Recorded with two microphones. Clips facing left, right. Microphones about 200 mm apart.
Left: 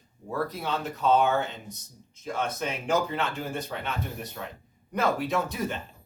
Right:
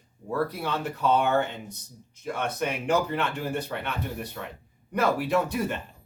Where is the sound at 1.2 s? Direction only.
60° right (ahead or behind).